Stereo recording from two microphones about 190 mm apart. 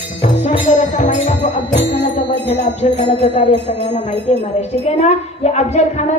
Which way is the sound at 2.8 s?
35° left (ahead or behind).